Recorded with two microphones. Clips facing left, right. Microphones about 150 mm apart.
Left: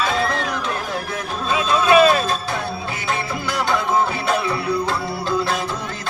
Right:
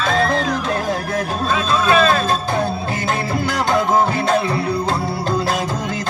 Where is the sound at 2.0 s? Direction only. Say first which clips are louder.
Left 4 dB; 10° left (ahead or behind).